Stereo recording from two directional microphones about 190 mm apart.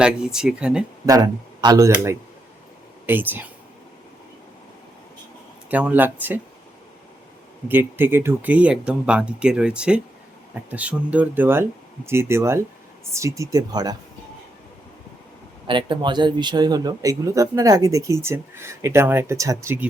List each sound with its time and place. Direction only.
0.0 s speech: 5° right (ahead or behind)
1.0 s speech: 20° right (ahead or behind)
5.7 s speech: 10° right (ahead or behind)
7.7 s speech: 10° right (ahead or behind)
15.6 s speech: 25° right (ahead or behind)